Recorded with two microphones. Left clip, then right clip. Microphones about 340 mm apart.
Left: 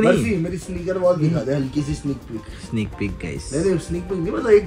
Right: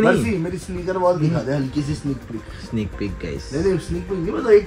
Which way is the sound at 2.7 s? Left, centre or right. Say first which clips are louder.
Even; centre.